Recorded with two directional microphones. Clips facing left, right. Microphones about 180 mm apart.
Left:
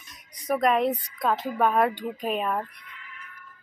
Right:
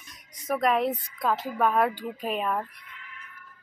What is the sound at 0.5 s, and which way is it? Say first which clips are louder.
Speech: left 2 dB; centre (ahead or behind).